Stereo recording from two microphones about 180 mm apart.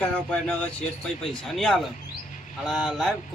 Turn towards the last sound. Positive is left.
turn(degrees=0)  # may be behind; listen again after turning